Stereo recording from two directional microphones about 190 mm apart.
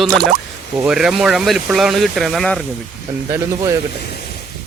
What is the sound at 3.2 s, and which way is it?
Speech, 15° right (ahead or behind).